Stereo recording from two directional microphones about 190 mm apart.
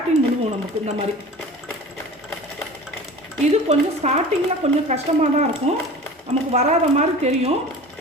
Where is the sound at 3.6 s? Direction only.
35° right (ahead or behind).